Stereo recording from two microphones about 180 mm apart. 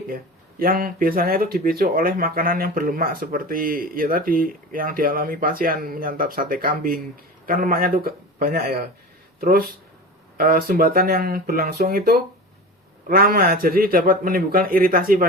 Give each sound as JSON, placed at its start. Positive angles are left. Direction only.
{"t": 0.6, "sound": "a man's voice", "side_deg": -55}